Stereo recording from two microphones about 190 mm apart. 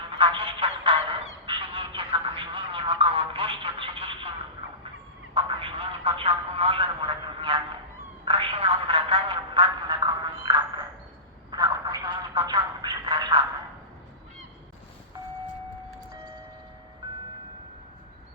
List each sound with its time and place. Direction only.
0.2 s music: 25° right (ahead or behind)
1.5 s telephone: 25° right (ahead or behind)
5.3 s telephone: 25° right (ahead or behind)
8.2 s a sound: 25° right (ahead or behind)